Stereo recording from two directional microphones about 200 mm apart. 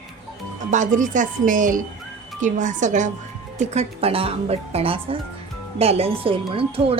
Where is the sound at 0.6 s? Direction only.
40° right (ahead or behind).